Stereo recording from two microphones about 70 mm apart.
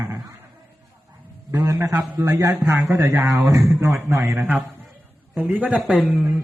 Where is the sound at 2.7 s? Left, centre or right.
Right.